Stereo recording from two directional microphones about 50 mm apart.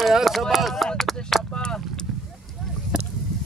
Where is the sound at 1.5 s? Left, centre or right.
Centre.